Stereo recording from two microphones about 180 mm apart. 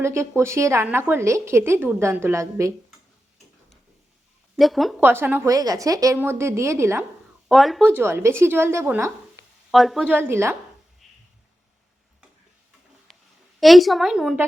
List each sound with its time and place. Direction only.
0.0 s a woman's voice: 15° right (ahead or behind)
4.5 s speech: centre (ahead or behind)
4.9 s a woman's voice: 10° right (ahead or behind)
7.4 s speech: centre (ahead or behind)
7.9 s a woman's voice: 15° right (ahead or behind)
9.7 s a woman's voice: centre (ahead or behind)
11.0 s a sound: centre (ahead or behind)
13.6 s speech: centre (ahead or behind)